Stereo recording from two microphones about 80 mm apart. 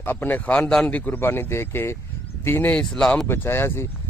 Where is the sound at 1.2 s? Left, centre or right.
Left.